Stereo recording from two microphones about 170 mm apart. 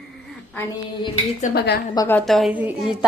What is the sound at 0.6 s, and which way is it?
Speech, 10° left (ahead or behind).